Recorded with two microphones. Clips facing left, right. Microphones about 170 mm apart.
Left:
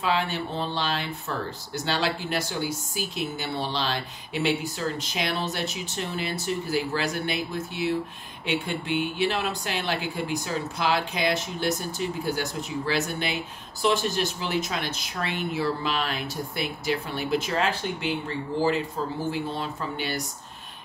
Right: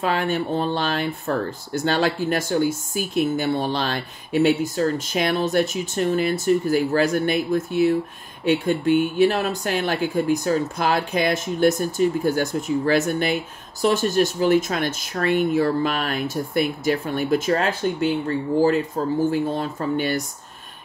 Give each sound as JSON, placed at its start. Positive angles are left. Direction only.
{"t": 0.0, "sound": "speech", "side_deg": -50}